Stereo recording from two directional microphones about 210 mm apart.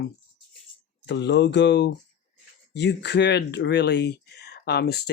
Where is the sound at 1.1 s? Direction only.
55° left (ahead or behind).